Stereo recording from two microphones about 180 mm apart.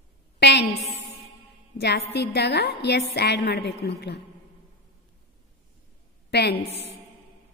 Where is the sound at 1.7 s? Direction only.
65° left (ahead or behind).